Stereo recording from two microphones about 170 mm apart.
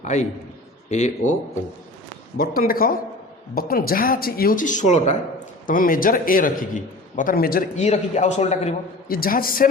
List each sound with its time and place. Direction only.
0.0 s a man's voice: 45° left (ahead or behind)
2.4 s a man's voice: 60° left (ahead or behind); by 5.1 s 45° left (ahead or behind)
5.6 s a man's voice: 55° left (ahead or behind)
7.8 s a man's voice: 45° left (ahead or behind)
9.0 s a man's voice: 60° left (ahead or behind)